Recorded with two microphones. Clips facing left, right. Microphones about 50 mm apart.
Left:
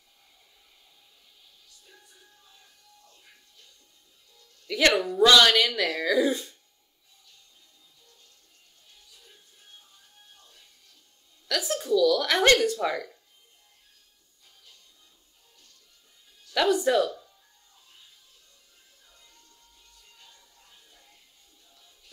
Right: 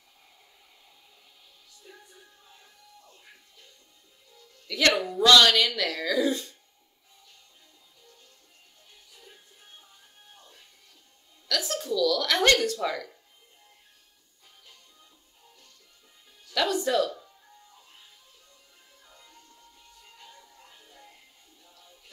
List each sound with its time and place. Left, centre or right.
1.9 s music: right
4.6 s speech: centre
10.3 s music: right
11.4 s speech: centre
16.5 s speech: centre
19.0 s music: right